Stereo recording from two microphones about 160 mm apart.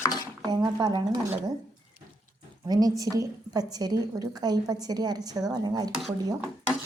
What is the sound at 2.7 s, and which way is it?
A woman's voice, 25° right (ahead or behind).